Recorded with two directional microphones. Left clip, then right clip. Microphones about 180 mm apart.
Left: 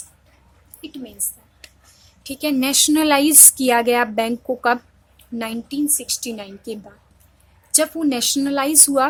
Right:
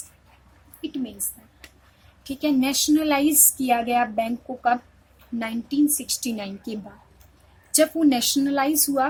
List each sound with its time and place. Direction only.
0.8 s a woman's voice: 10° left (ahead or behind)
2.2 s speech: 30° left (ahead or behind); by 4.8 s 50° left (ahead or behind)
5.4 s a woman's voice: 25° left (ahead or behind); by 6.7 s 10° left (ahead or behind)
7.7 s a woman's voice: 20° left (ahead or behind)